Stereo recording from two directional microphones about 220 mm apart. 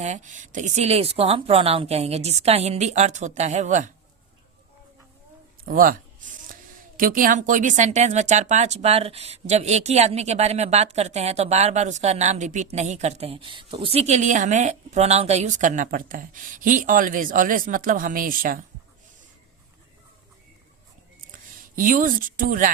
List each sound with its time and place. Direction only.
0.0 s speech: 35° right (ahead or behind)
5.6 s speech: 40° right (ahead or behind)
21.8 s speech: 40° right (ahead or behind)